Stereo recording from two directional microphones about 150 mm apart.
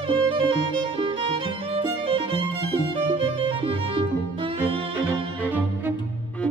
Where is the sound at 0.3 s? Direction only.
35° right (ahead or behind).